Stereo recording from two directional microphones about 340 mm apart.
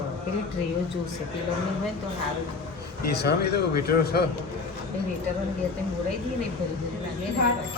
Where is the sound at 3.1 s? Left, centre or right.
Left.